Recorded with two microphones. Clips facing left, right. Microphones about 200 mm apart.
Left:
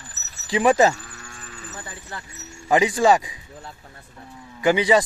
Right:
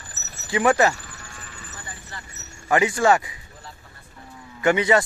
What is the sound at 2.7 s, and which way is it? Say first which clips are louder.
Speech: left 1 dB; 15° left (ahead or behind).